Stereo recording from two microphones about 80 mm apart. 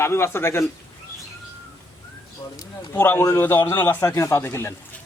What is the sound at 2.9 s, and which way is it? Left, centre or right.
Speech, left.